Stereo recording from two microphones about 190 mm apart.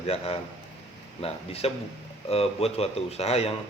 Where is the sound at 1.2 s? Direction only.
30° left (ahead or behind).